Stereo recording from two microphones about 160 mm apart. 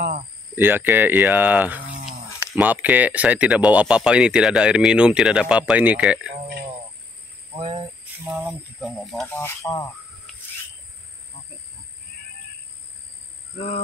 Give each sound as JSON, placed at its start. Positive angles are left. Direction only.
{"t": 0.6, "sound": "speech", "side_deg": -15}
{"t": 8.3, "sound": "speech", "side_deg": -5}
{"t": 9.4, "sound": "speech", "side_deg": 20}
{"t": 13.6, "sound": "speech", "side_deg": 50}